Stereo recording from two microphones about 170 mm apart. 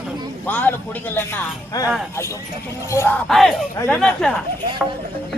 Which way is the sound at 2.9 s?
15° left (ahead or behind).